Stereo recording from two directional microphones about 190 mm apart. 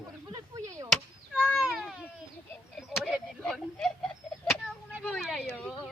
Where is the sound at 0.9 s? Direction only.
5° left (ahead or behind).